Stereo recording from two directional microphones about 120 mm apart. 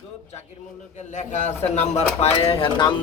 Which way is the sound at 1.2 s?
75° left (ahead or behind).